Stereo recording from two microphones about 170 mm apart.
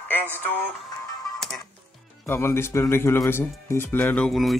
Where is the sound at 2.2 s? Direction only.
15° left (ahead or behind).